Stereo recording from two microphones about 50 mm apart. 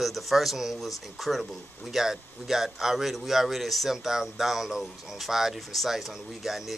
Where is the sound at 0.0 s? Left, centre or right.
Centre.